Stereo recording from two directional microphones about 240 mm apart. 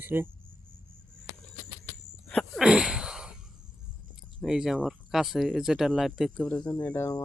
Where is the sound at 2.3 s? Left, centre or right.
Centre.